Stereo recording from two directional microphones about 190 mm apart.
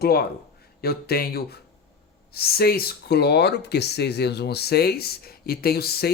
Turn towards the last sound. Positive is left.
turn(degrees=55)  # may be behind; listen again after turning